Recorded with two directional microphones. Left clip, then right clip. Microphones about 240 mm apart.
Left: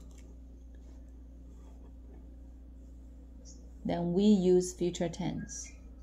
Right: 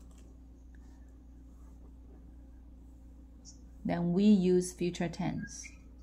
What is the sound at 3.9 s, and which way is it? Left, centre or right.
Speech, right.